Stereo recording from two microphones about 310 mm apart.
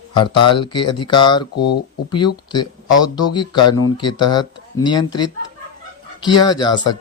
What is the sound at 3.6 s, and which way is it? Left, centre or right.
Speech, left.